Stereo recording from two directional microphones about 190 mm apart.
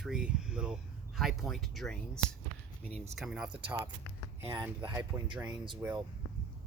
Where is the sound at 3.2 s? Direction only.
5° right (ahead or behind).